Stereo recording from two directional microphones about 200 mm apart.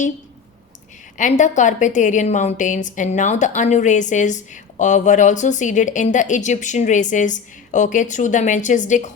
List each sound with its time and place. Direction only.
1.1 s a woman's voice: 40° left (ahead or behind)